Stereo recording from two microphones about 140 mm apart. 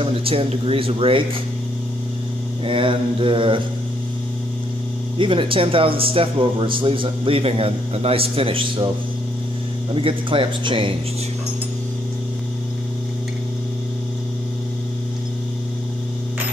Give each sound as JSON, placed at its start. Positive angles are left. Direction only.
{"t": 0.0, "sound": "speech", "side_deg": -40}
{"t": 2.6, "sound": "speech", "side_deg": -40}
{"t": 5.1, "sound": "speech", "side_deg": -35}
{"t": 9.9, "sound": "speech", "side_deg": -40}